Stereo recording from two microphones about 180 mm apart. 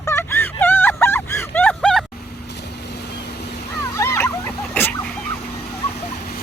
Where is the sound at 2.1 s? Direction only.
65° left (ahead or behind).